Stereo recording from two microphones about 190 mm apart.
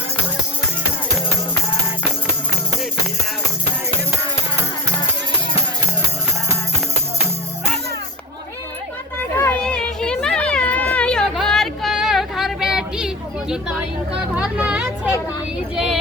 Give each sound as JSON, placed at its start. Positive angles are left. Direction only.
{"t": 9.4, "sound": "children playing", "side_deg": 5}
{"t": 13.5, "sound": "a sound", "side_deg": -5}
{"t": 14.3, "sound": "vehicle", "side_deg": -5}